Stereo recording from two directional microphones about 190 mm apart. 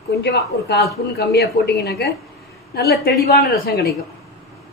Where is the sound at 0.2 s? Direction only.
60° left (ahead or behind).